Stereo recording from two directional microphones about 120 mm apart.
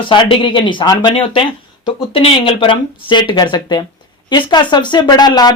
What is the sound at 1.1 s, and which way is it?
Speech, 45° left (ahead or behind).